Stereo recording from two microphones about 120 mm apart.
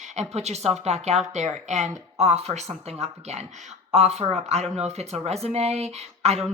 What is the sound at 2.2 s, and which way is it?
Speech, 60° right (ahead or behind).